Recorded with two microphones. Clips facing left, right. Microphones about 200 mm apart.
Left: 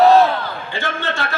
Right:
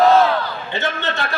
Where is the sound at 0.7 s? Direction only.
20° right (ahead or behind).